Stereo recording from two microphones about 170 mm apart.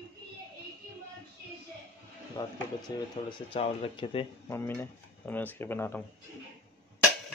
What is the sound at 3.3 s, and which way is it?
Speech, 35° left (ahead or behind).